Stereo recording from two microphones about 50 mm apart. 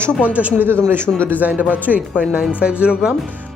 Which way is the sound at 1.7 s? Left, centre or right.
Right.